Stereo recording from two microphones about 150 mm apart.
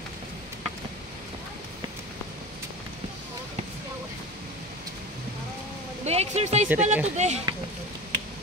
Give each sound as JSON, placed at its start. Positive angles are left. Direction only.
{"t": 6.0, "sound": "speech", "side_deg": -45}
{"t": 6.7, "sound": "speech", "side_deg": -10}
{"t": 7.2, "sound": "speech", "side_deg": -50}